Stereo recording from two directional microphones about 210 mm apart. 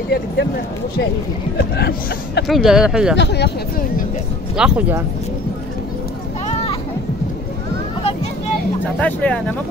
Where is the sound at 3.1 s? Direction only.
55° left (ahead or behind).